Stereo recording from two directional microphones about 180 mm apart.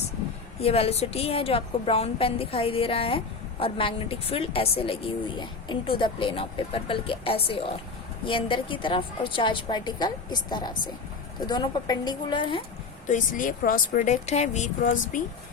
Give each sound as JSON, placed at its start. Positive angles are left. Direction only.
{"t": 0.6, "sound": "a woman's voice", "side_deg": 35}
{"t": 13.1, "sound": "speech", "side_deg": 45}